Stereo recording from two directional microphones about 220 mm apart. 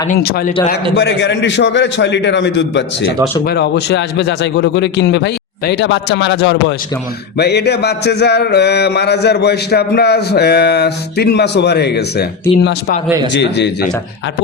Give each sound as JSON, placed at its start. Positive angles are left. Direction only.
{"t": 0.1, "sound": "mantra", "side_deg": 45}